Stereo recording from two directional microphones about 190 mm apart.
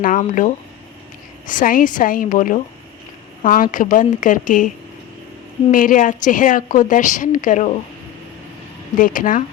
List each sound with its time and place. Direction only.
0.0 s a woman's voice: 45° left (ahead or behind)
5.7 s a woman's voice: 45° left (ahead or behind)
9.0 s a woman's voice: 45° left (ahead or behind)